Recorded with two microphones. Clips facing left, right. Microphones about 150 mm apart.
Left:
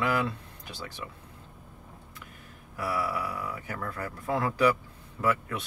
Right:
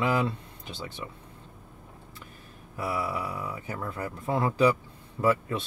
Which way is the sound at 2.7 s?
25° right (ahead or behind).